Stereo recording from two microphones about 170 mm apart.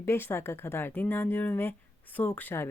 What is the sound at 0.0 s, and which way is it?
Speech, 15° left (ahead or behind).